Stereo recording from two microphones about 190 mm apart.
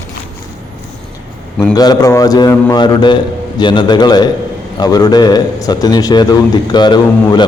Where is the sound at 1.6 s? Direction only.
20° left (ahead or behind).